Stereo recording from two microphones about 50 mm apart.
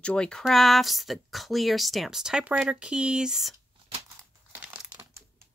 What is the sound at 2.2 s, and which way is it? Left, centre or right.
Speech, centre.